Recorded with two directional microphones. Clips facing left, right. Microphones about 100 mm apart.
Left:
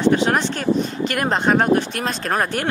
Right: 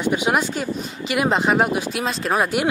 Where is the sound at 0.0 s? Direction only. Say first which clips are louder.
Left 3 dB; 10° right (ahead or behind).